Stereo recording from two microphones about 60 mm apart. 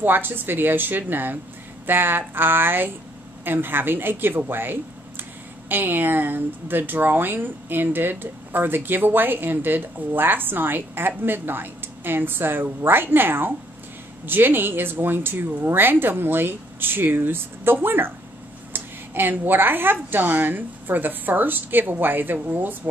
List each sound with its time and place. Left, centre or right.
0.0 s speech: right